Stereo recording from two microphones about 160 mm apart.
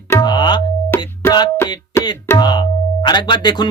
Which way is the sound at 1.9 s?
15° left (ahead or behind).